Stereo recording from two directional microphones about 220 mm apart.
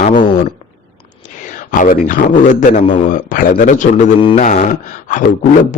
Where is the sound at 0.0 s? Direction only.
35° left (ahead or behind).